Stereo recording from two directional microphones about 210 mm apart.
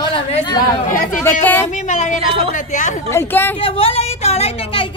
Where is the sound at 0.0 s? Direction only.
20° left (ahead or behind).